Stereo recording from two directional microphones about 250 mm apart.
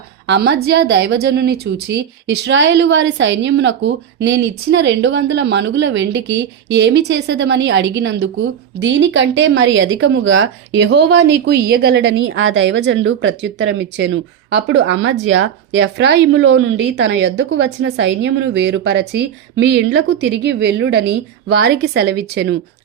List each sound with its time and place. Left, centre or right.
0.3 s a woman's voice: right